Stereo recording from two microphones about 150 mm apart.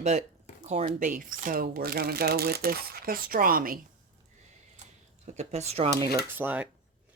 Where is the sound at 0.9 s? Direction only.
60° right (ahead or behind).